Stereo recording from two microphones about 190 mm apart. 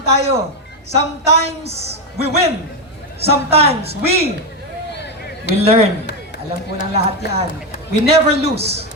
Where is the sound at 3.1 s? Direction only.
30° right (ahead or behind).